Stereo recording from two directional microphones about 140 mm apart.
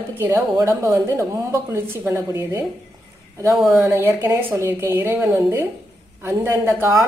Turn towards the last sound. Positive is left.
turn(degrees=-15)  # may be behind; listen again after turning